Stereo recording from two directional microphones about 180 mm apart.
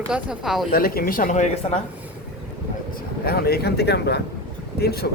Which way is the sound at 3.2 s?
60° left (ahead or behind).